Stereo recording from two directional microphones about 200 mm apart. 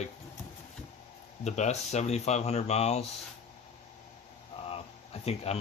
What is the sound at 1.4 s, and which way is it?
Speech, 35° left (ahead or behind).